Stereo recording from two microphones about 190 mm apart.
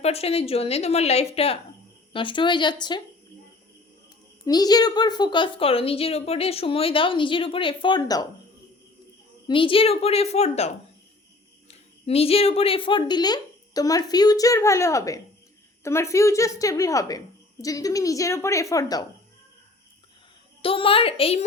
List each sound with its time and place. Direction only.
0.0 s a woman's voice: 30° left (ahead or behind)
4.4 s a woman's voice: 20° left (ahead or behind)
9.5 s a woman's voice: 25° left (ahead or behind)
11.7 s a woman's voice: 30° left (ahead or behind)
20.6 s a woman's voice: 30° left (ahead or behind)